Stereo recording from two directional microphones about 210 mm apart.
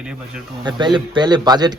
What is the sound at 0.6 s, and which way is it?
A man's voice, 20° right (ahead or behind).